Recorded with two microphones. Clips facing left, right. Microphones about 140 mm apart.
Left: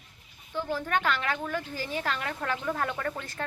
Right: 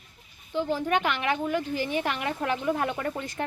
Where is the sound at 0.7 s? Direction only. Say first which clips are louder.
Right 1 dB; 15° right (ahead or behind).